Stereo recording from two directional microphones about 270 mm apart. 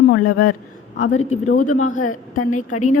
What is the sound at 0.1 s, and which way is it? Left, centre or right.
Speech, left.